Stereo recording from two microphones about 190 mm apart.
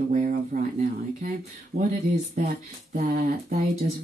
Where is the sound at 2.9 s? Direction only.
40° right (ahead or behind).